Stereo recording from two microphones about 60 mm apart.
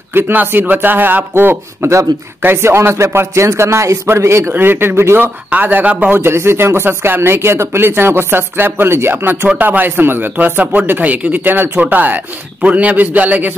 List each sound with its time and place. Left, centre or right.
0.1 s a man's voice: right
5.5 s a man's voice: right
6.1 s a man's voice: right